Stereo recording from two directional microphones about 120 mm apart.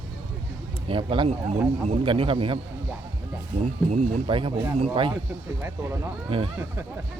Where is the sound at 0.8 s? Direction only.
45° right (ahead or behind).